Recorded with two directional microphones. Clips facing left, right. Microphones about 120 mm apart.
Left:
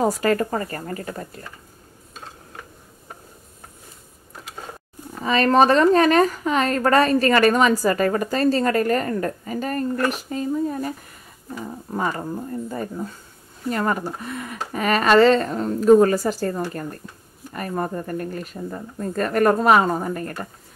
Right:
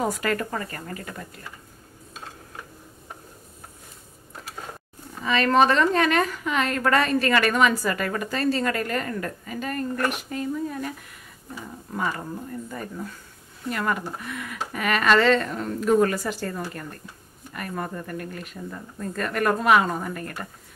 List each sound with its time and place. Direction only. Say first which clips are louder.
0.0 s a woman's voice: left 6 dB; 35° left (ahead or behind)
5.2 s a woman's voice: left 3 dB; 35° left (ahead or behind)